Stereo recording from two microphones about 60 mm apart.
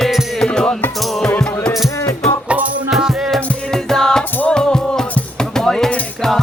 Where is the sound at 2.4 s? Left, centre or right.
Right.